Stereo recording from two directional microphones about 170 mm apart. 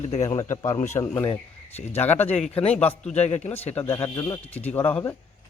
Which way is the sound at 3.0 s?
40° left (ahead or behind).